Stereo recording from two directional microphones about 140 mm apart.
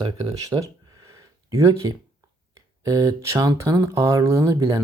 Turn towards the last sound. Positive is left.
turn(degrees=-25)  # may be behind; listen again after turning